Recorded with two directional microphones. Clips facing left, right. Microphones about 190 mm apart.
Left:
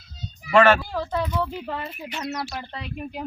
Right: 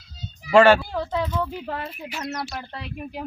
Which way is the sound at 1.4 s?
Centre (ahead or behind).